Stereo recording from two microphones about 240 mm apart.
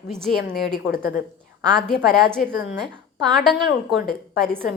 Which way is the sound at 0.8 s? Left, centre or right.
Left.